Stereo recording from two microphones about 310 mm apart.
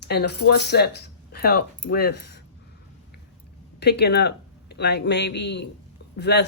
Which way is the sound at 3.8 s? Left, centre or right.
Left.